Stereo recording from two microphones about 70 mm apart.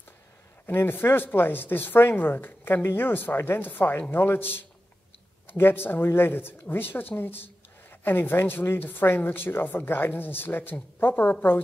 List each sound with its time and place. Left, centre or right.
0.7 s speech: left